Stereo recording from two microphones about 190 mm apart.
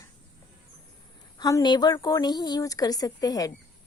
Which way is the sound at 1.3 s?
20° left (ahead or behind).